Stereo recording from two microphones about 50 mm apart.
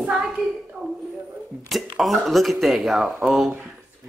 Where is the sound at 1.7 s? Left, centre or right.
Centre.